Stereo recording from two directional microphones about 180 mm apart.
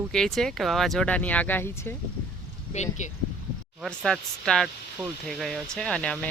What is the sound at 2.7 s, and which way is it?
Speech, 40° left (ahead or behind).